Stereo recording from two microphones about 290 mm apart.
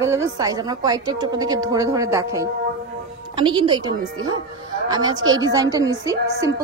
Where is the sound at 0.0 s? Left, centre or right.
Centre.